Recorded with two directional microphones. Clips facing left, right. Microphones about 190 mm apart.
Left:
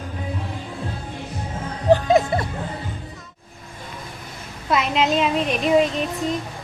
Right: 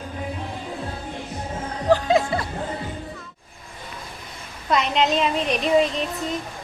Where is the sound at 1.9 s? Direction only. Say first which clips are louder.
Left 3 dB; 20° left (ahead or behind).